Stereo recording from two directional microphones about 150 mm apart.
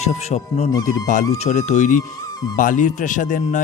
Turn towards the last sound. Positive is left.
turn(degrees=60)  # may be behind; listen again after turning